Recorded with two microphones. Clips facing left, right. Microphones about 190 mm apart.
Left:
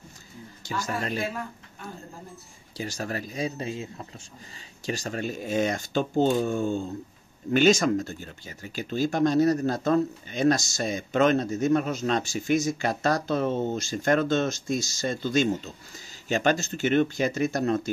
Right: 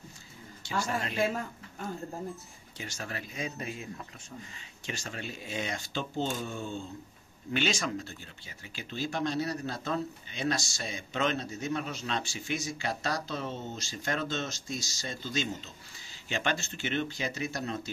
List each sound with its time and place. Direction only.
0.7 s speech: 40° left (ahead or behind)
2.8 s speech: 40° left (ahead or behind)
4.8 s speech: 40° left (ahead or behind)